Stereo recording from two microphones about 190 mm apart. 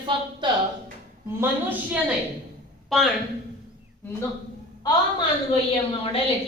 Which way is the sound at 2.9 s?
Centre (ahead or behind).